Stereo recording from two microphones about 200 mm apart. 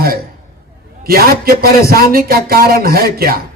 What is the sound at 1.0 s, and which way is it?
Speech, 50° right (ahead or behind).